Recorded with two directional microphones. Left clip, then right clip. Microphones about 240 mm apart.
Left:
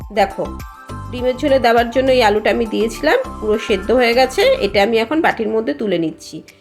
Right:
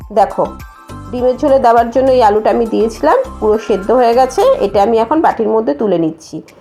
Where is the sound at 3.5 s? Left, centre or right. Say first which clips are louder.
Right 2 dB; centre.